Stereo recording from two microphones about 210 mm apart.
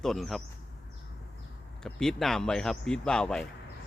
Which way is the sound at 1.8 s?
Centre (ahead or behind).